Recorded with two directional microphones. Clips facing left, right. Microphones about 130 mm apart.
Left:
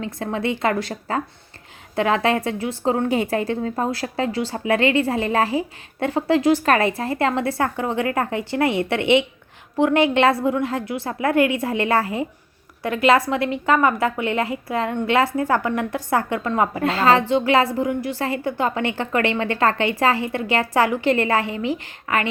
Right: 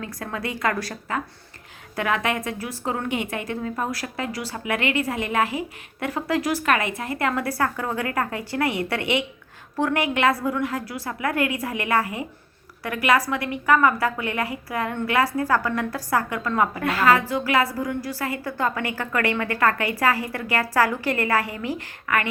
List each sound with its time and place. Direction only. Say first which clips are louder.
0.0 s a woman's voice: left 6 dB; 25° left (ahead or behind)